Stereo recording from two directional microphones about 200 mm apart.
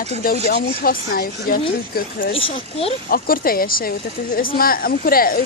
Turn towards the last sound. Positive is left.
turn(degrees=45)  # may be behind; listen again after turning